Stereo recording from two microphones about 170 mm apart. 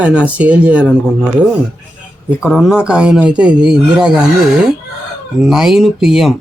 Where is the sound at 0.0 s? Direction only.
5° right (ahead or behind).